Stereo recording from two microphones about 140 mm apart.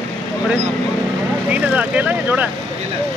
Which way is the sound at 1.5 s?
10° right (ahead or behind).